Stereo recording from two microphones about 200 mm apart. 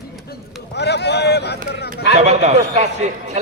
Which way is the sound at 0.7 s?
55° left (ahead or behind).